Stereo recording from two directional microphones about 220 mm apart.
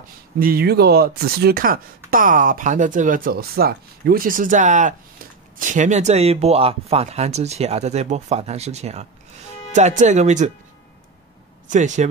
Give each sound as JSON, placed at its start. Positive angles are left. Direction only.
{"t": 0.4, "sound": "speech", "side_deg": -45}
{"t": 11.7, "sound": "speech", "side_deg": -35}